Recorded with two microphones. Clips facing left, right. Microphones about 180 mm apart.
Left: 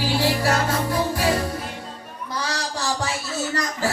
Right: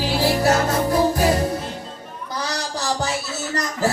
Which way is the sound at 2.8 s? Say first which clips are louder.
Right 3 dB; 40° right (ahead or behind).